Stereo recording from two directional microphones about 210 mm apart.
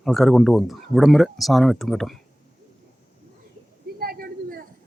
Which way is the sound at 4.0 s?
45° right (ahead or behind).